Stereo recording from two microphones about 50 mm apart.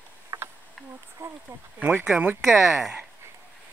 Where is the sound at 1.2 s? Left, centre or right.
Right.